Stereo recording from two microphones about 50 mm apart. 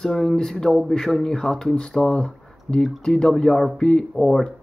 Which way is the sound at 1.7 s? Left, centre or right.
Centre.